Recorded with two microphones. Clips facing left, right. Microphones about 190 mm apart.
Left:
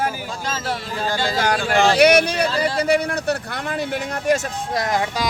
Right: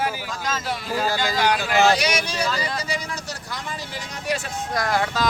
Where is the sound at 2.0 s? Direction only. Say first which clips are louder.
Left 10 dB; 60° left (ahead or behind).